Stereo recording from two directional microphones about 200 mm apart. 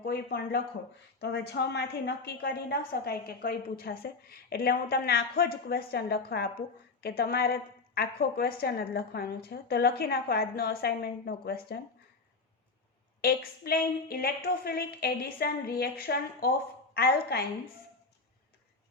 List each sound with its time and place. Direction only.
0.0 s a woman's voice: 50° left (ahead or behind)
13.2 s a woman's voice: 50° left (ahead or behind)